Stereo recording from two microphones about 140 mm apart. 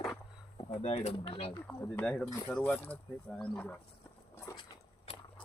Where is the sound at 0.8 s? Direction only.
50° left (ahead or behind).